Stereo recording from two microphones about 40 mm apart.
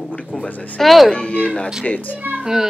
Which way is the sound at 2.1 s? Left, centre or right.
Right.